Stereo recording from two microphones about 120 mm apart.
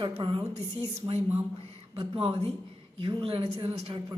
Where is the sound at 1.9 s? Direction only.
50° right (ahead or behind).